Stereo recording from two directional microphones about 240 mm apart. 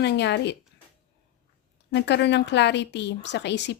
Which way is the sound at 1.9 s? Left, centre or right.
Left.